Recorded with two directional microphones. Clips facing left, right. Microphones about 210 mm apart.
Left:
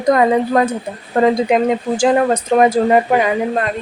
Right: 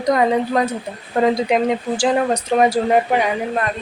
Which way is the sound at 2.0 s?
50° left (ahead or behind).